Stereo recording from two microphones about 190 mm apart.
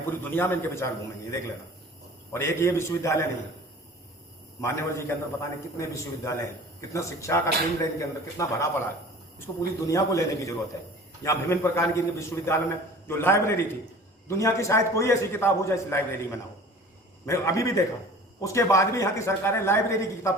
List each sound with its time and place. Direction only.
0.0 s a man's voice: 10° left (ahead or behind)
2.3 s a man's voice: 15° left (ahead or behind)
4.6 s a man's voice: 15° left (ahead or behind)